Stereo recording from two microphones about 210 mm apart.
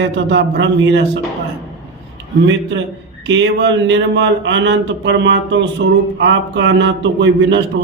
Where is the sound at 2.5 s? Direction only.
60° right (ahead or behind).